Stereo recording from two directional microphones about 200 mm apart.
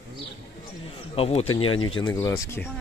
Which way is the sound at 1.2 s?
30° left (ahead or behind).